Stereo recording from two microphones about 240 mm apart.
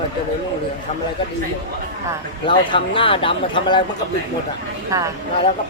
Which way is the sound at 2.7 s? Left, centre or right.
Left.